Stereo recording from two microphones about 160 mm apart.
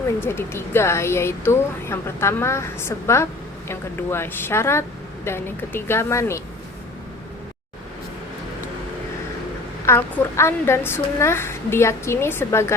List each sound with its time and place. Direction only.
0.2 s speech: 15° left (ahead or behind)
9.8 s speech: 15° left (ahead or behind)